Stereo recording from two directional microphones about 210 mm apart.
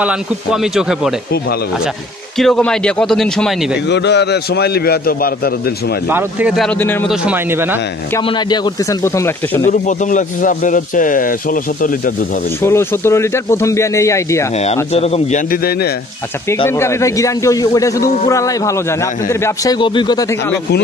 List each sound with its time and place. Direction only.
0.0 s a man's voice: 5° right (ahead or behind)
2.3 s a man's voice: 5° left (ahead or behind)
3.9 s a man's voice: 55° left (ahead or behind)
6.0 s a man's voice: 5° right (ahead or behind); by 7.1 s 10° left (ahead or behind)
7.1 s a man's voice: 5° right (ahead or behind)
8.3 s a man's voice: 20° left (ahead or behind)
9.7 s speech: 35° left (ahead or behind)
12.6 s a man's voice: 10° left (ahead or behind)
14.6 s speech: 30° left (ahead or behind)
15.5 s a man's voice: 45° left (ahead or behind)
16.6 s a man's voice: 10° left (ahead or behind)